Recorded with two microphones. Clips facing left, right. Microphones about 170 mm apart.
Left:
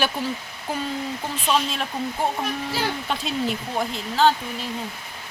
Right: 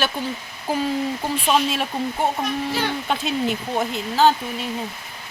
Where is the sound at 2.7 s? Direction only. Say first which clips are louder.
Right 3 dB; centre (ahead or behind).